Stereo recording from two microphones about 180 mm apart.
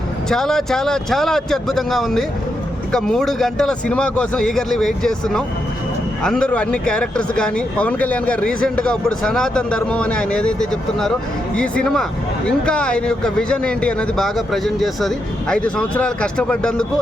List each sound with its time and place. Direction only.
0.3 s speech: 5° left (ahead or behind)